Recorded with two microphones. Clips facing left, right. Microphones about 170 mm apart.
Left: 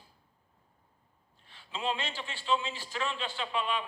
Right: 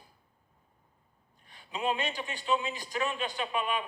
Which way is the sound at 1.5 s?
15° right (ahead or behind).